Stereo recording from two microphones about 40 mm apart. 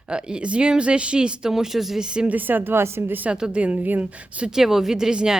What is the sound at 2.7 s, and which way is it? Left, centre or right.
Speech, right.